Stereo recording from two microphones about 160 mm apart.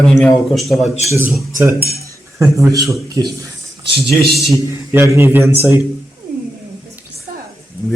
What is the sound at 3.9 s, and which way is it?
Speech, 35° right (ahead or behind).